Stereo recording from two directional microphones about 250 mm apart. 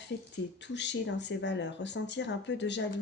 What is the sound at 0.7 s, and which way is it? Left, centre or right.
Speech, left.